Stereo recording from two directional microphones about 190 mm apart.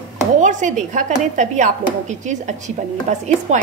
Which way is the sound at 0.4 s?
40° right (ahead or behind).